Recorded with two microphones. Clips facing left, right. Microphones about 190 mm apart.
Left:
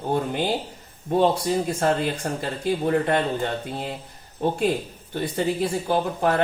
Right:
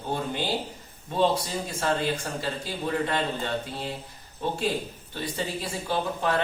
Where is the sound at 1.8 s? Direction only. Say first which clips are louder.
Left 4 dB; 55° left (ahead or behind).